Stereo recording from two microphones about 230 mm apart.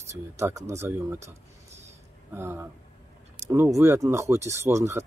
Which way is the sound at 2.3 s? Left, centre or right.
Centre.